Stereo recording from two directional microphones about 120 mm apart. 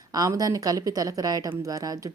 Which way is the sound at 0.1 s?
30° right (ahead or behind).